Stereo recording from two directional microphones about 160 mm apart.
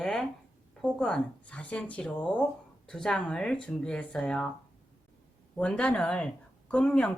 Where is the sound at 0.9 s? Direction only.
5° left (ahead or behind).